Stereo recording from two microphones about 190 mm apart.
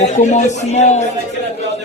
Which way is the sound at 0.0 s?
35° left (ahead or behind).